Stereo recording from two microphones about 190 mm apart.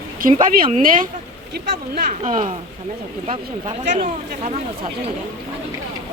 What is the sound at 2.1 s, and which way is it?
Speech, 45° right (ahead or behind).